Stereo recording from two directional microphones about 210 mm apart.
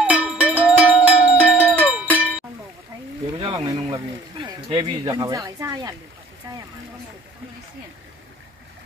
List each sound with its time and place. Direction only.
0.0 s music: 5° right (ahead or behind)
1.6 s music: 10° left (ahead or behind)
3.3 s speech: 20° right (ahead or behind)